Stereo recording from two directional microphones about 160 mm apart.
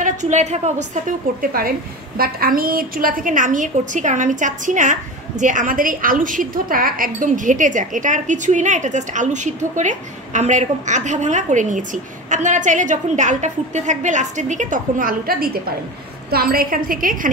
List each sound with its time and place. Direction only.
0.0 s a woman's voice: 50° right (ahead or behind)